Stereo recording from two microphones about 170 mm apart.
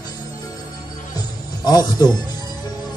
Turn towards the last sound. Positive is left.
turn(degrees=25)  # may be behind; listen again after turning